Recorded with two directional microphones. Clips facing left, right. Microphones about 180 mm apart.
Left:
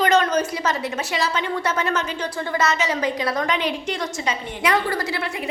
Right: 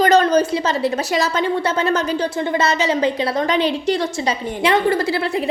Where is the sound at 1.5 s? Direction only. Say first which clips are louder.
Right 4 dB; 30° right (ahead or behind).